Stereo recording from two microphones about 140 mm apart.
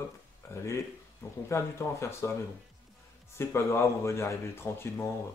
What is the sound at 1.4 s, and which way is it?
Speech, 20° left (ahead or behind).